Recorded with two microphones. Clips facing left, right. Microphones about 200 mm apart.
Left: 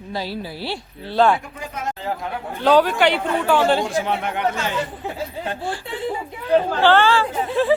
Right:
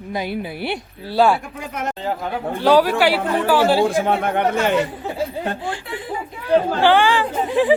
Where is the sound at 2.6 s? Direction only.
10° right (ahead or behind).